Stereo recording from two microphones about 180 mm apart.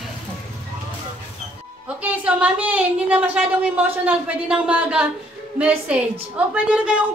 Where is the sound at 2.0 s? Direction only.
5° right (ahead or behind).